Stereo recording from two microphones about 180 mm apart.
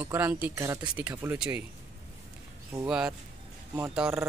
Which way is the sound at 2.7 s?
5° right (ahead or behind).